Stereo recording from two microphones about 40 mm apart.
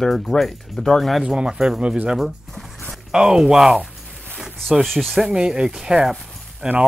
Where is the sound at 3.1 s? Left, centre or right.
Centre.